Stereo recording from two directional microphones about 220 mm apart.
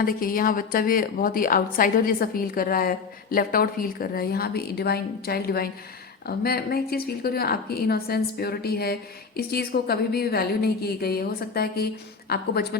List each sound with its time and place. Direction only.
0.0 s a woman's voice: 40° left (ahead or behind)